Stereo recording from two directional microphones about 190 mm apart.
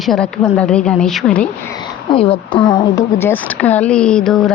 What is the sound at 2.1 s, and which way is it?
Speech, 30° left (ahead or behind).